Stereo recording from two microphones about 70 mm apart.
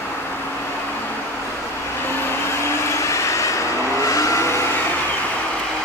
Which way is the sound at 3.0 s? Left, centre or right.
Left.